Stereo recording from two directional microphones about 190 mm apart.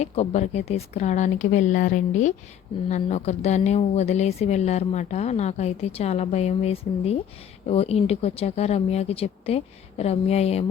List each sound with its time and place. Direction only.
0.0 s speech: 35° left (ahead or behind)